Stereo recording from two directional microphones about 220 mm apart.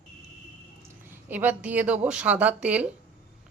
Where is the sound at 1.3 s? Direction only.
10° right (ahead or behind).